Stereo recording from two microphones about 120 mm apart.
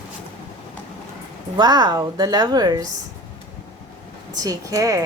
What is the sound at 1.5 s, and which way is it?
A woman's voice, 35° right (ahead or behind).